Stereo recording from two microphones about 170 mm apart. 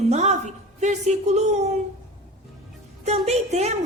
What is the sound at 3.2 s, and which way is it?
Speech, 40° right (ahead or behind).